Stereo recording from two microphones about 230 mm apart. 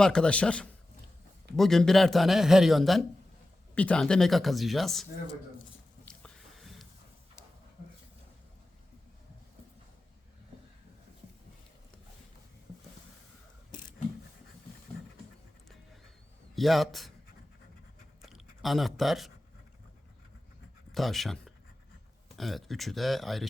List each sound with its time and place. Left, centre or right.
0.0 s a man's voice: centre
6.1 s a sound: centre
16.6 s a man's voice: centre
18.2 s chewing: centre
20.9 s a man's voice: centre